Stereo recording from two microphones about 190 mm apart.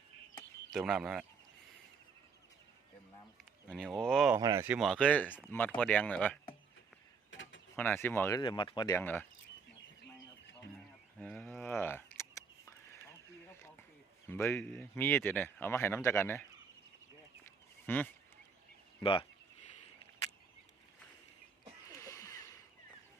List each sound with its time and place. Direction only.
0.7 s speech: centre (ahead or behind)
3.7 s speech: 5° left (ahead or behind)
4.4 s speech: 15° right (ahead or behind); by 6.4 s 5° left (ahead or behind)
7.3 s mechanisms: 80° left
7.8 s speech: 10° left (ahead or behind)
8.4 s speech: 25° left (ahead or behind)
9.0 s speech: 10° left (ahead or behind)
11.2 s a sound: 5° left (ahead or behind)
14.3 s speech: 10° left (ahead or behind)
17.4 s duck: 10° left (ahead or behind)
18.9 s speech: 25° left (ahead or behind)
21.8 s a sound: 15° left (ahead or behind)